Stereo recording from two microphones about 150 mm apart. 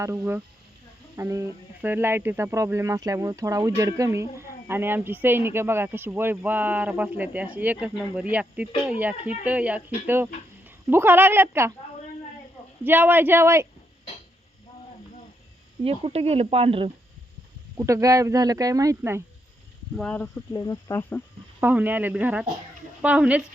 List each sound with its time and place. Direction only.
0.0 s speech: 15° right (ahead or behind)
12.8 s speech: 15° right (ahead or behind)
15.8 s speech: 40° right (ahead or behind)
17.7 s speech: 20° right (ahead or behind)
20.0 s speech: 5° left (ahead or behind)
20.5 s speech: 25° left (ahead or behind)
21.6 s speech: 10° right (ahead or behind)